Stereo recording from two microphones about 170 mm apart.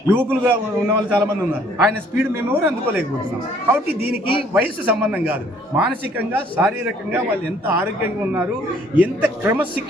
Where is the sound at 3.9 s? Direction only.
65° right (ahead or behind).